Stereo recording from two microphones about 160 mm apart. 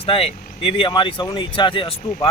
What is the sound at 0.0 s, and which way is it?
Speech, 40° left (ahead or behind).